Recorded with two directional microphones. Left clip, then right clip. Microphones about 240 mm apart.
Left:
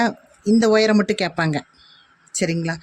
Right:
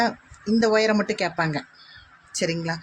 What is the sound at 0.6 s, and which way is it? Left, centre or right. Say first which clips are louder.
Speech: left 3 dB; left.